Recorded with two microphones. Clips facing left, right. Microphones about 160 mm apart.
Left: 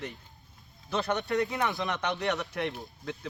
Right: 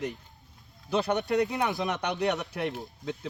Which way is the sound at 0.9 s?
15° right (ahead or behind).